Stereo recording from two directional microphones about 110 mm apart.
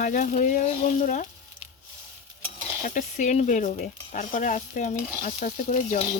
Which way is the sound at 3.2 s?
90° left.